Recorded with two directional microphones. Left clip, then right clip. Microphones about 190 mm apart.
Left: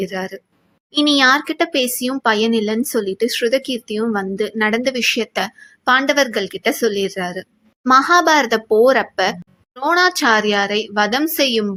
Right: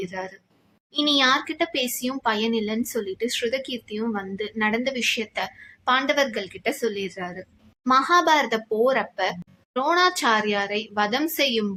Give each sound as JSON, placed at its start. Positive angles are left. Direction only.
{"t": 0.0, "sound": "speech", "side_deg": 30}